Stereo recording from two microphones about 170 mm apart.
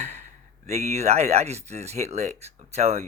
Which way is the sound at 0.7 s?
40° right (ahead or behind).